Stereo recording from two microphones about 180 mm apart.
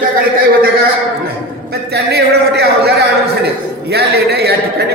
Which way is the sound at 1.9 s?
65° right (ahead or behind).